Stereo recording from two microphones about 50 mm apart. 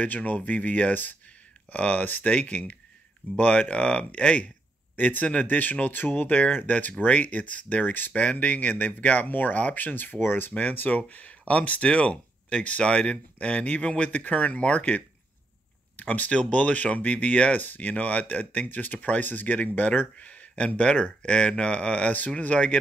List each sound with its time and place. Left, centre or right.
0.0 s speech: left
4.9 s a man's voice: left